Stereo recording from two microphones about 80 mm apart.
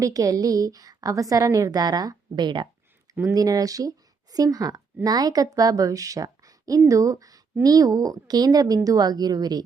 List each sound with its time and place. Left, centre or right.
0.0 s a woman's voice: right
3.3 s a woman's voice: right